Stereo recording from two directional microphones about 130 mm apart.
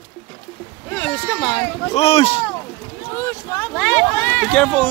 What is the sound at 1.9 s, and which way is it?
Speech, 50° left (ahead or behind).